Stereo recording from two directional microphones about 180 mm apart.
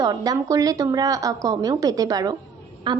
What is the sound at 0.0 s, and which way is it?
A woman's voice, 20° right (ahead or behind).